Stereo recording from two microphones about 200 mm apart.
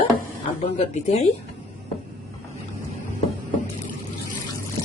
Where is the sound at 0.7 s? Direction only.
35° left (ahead or behind).